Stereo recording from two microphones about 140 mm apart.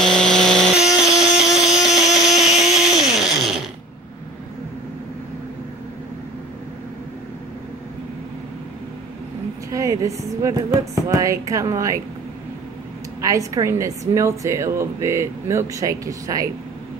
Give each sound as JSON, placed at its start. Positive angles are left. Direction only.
{"t": 0.0, "sound": "tools", "side_deg": 5}
{"t": 1.0, "sound": "a sound", "side_deg": -5}
{"t": 9.7, "sound": "a woman's voice", "side_deg": -20}
{"t": 13.2, "sound": "a woman's voice", "side_deg": -25}